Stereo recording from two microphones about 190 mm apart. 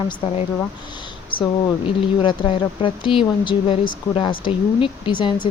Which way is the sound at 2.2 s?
25° left (ahead or behind).